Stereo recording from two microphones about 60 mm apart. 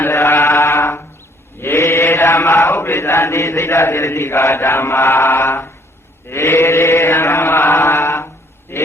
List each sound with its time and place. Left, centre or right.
0.0 s chant: left
0.3 s mantra: left
3.7 s chant: left
8.7 s a sound: left